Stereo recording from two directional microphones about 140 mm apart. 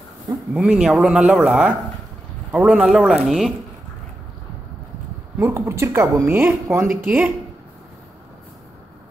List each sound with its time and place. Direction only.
0.6 s speech: 5° right (ahead or behind)
5.4 s speech: 20° right (ahead or behind)
6.9 s speech: 10° right (ahead or behind)